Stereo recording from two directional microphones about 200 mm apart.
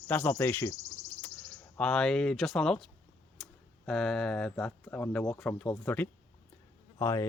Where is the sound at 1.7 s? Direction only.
5° left (ahead or behind).